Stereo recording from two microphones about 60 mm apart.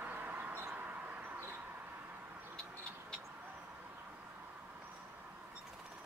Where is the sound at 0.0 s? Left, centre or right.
Right.